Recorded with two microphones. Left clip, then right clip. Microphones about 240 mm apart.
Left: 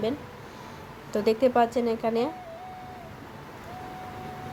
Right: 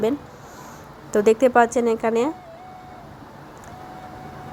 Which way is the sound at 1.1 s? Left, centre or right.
Right.